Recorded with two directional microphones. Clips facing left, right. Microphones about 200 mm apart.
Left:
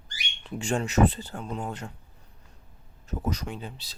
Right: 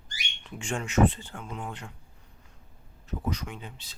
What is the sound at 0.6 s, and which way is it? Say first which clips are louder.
Speech: left 1 dB; 35° left (ahead or behind).